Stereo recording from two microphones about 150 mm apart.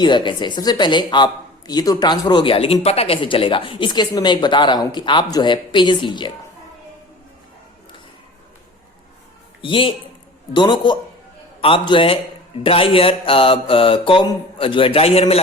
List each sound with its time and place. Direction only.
0.0 s speech: 30° left (ahead or behind)
9.6 s a man's voice: 35° left (ahead or behind)